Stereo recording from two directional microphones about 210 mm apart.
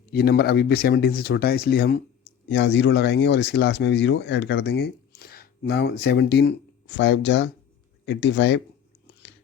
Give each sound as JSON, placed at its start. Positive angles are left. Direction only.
{"t": 0.1, "sound": "speech", "side_deg": 50}
{"t": 2.5, "sound": "speech", "side_deg": 60}